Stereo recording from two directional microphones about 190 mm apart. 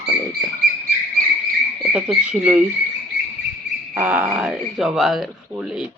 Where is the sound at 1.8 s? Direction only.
5° right (ahead or behind).